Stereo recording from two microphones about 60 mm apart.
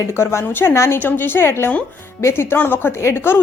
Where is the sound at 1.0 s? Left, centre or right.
Left.